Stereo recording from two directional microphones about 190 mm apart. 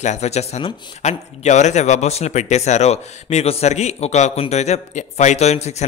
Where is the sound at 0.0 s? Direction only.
35° left (ahead or behind).